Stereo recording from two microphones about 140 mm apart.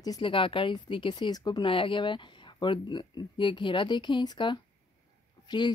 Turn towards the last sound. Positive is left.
turn(degrees=30)  # may be behind; listen again after turning